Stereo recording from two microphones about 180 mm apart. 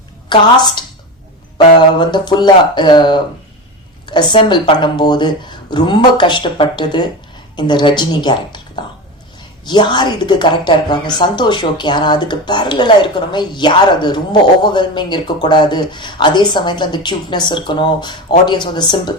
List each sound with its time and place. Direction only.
0.3 s a woman's voice: 25° left (ahead or behind)